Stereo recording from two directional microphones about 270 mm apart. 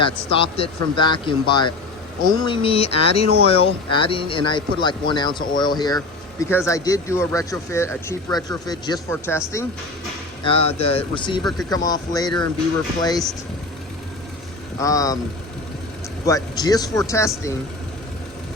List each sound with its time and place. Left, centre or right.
0.0 s speech: centre
10.4 s speech: centre
14.8 s speech: centre
16.2 s speech: centre